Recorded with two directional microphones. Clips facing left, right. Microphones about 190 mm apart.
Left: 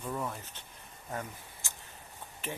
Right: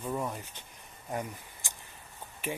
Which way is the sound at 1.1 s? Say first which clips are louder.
Right 4 dB; 15° right (ahead or behind).